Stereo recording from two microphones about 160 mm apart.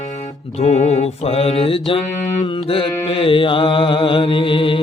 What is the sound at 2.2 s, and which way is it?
Mantra, 20° left (ahead or behind).